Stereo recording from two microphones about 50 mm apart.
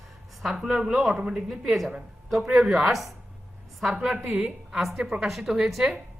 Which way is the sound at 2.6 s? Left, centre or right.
Centre.